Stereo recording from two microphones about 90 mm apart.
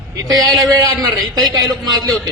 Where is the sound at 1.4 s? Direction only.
50° right (ahead or behind).